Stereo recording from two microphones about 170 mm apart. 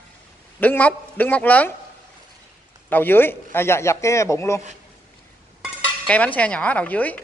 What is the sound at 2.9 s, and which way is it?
Speech, 10° left (ahead or behind).